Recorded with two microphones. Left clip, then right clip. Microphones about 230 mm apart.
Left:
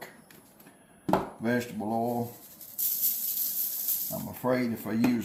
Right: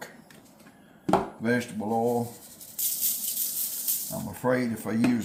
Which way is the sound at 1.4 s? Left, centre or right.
Centre.